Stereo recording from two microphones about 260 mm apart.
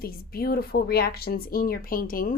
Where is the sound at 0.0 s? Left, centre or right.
Left.